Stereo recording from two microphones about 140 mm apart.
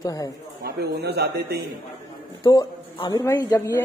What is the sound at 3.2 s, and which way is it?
Speech, 25° left (ahead or behind).